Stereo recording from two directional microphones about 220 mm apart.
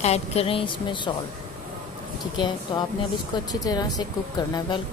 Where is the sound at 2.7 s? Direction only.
20° left (ahead or behind).